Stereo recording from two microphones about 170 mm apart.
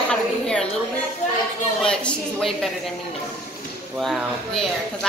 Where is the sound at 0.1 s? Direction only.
5° left (ahead or behind).